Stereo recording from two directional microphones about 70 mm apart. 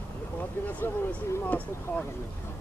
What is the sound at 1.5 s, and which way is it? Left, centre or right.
Speech, left.